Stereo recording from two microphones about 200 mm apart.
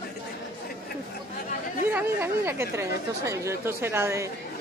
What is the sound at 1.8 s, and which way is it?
A woman's voice, 10° right (ahead or behind).